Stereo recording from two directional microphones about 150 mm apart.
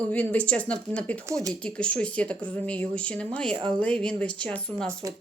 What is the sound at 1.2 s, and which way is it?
Speech, 20° right (ahead or behind).